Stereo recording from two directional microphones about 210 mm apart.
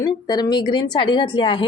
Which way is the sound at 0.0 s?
20° left (ahead or behind).